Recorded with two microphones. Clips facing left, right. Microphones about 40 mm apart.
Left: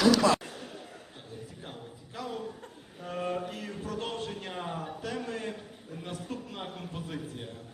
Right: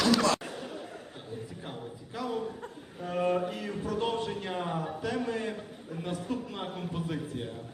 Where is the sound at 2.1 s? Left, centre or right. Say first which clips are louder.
Right 4 dB; centre.